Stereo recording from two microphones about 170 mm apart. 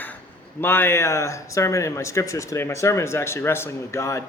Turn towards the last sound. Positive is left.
turn(degrees=15)  # may be behind; listen again after turning